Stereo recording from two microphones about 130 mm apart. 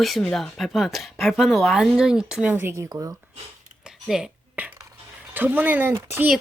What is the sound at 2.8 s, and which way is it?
Speech, 25° right (ahead or behind).